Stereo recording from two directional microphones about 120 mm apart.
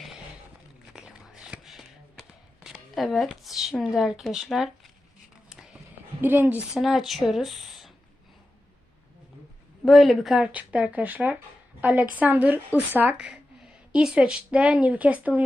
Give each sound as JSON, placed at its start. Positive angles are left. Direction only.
{"t": 0.9, "sound": "a sound", "side_deg": -5}
{"t": 3.2, "sound": "speech", "side_deg": 0}
{"t": 6.2, "sound": "speech", "side_deg": -15}
{"t": 6.7, "sound": "speech", "side_deg": -5}
{"t": 9.8, "sound": "speech", "side_deg": 0}